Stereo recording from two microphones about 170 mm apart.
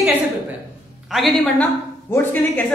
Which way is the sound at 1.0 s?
Centre (ahead or behind).